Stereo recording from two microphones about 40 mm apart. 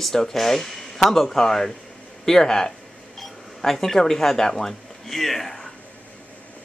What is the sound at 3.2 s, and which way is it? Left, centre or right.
Speech, centre.